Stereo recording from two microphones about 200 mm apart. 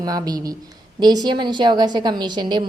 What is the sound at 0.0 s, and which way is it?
A woman's voice, 20° right (ahead or behind).